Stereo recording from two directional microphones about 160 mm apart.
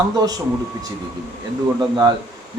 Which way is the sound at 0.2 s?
25° right (ahead or behind).